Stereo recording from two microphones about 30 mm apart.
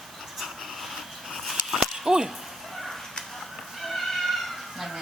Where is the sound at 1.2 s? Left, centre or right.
Centre.